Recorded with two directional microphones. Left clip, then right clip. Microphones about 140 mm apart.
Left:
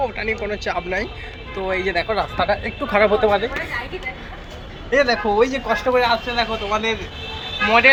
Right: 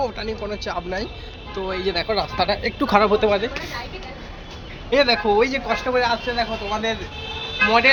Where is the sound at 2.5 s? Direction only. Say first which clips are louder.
Right 1 dB; 80° right.